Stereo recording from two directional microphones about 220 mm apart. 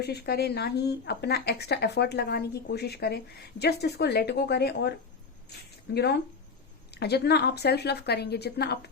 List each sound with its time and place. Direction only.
0.0 s speech: 45° left (ahead or behind)